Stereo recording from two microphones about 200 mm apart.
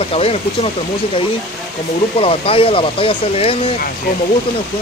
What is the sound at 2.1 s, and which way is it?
Speech, 30° left (ahead or behind).